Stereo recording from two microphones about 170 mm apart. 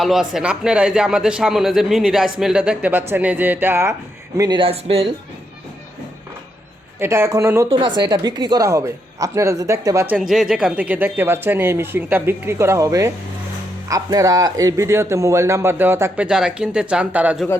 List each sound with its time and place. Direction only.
0.0 s speech: centre (ahead or behind)
4.4 s speech: 25° right (ahead or behind)
7.0 s a man's voice: 15° right (ahead or behind)
7.7 s speech: 25° right (ahead or behind)
10.2 s a man's voice: centre (ahead or behind)